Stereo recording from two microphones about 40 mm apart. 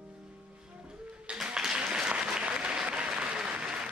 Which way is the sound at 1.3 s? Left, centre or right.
Centre.